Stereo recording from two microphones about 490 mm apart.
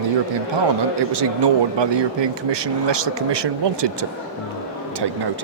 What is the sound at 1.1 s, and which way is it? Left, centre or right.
Speech, right.